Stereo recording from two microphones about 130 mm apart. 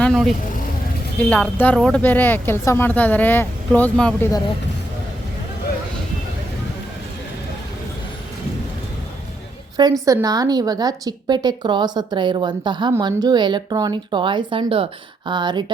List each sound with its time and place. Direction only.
0.0 s vehicle: 5° left (ahead or behind)
1.2 s speech: 10° left (ahead or behind)
10.1 s a woman's voice: 25° right (ahead or behind)